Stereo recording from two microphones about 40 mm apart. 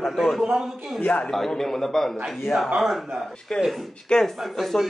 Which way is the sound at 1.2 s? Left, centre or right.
Centre.